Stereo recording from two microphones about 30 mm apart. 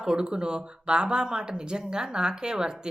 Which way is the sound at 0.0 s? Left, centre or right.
Right.